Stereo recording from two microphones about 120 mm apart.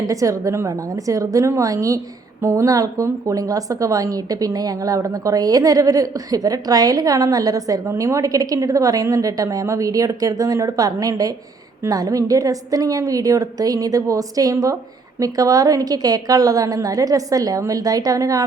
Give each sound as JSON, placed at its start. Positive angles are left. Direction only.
{"t": 0.1, "sound": "a woman's voice", "side_deg": -25}